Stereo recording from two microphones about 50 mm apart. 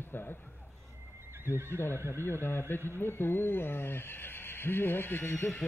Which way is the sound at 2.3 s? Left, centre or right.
Left.